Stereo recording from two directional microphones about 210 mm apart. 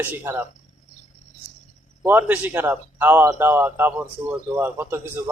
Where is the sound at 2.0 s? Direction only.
10° right (ahead or behind).